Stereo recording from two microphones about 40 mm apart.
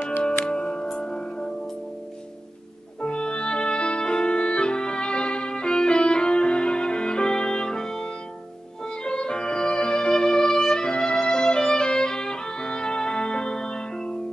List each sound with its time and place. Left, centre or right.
0.5 s music: left
3.0 s music: left